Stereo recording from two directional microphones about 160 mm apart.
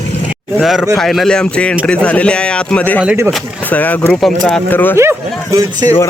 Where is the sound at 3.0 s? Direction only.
10° right (ahead or behind).